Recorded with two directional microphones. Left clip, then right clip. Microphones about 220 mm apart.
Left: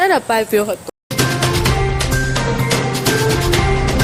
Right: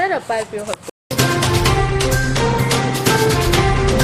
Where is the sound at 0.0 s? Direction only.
45° left (ahead or behind).